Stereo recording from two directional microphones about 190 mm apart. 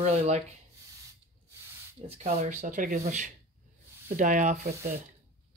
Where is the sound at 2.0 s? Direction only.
35° right (ahead or behind).